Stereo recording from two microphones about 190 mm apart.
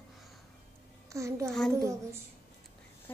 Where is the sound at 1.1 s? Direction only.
15° right (ahead or behind).